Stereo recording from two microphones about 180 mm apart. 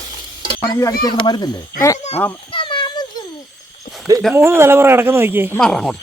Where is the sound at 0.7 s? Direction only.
15° left (ahead or behind).